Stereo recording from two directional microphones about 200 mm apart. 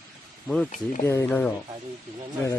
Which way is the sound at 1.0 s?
10° left (ahead or behind).